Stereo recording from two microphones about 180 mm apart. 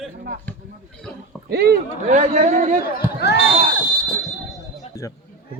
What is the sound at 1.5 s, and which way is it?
Speech, 65° right (ahead or behind).